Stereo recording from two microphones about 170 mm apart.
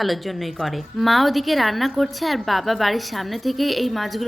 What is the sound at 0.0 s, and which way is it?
A woman's voice, centre (ahead or behind).